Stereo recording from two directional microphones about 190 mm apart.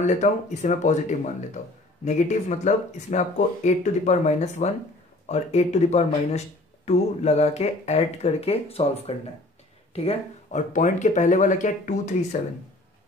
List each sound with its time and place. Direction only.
0.0 s speech: 40° left (ahead or behind)